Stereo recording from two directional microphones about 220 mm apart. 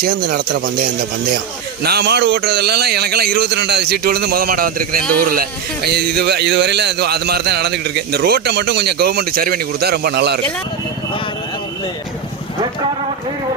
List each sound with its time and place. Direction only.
0.3 s speech: 45° right (ahead or behind)
1.8 s speech: 45° right (ahead or behind)